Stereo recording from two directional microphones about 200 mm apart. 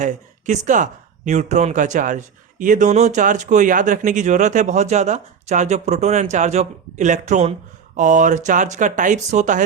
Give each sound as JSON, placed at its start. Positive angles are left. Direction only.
{"t": 0.0, "sound": "speech", "side_deg": -35}